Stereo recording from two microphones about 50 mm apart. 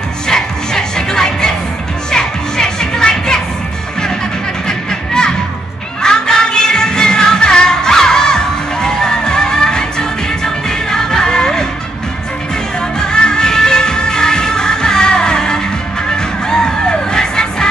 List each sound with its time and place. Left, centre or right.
0.3 s music: centre
4.6 s music: centre
13.0 s music: centre